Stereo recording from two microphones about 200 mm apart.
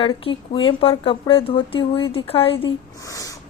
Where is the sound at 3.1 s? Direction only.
15° left (ahead or behind).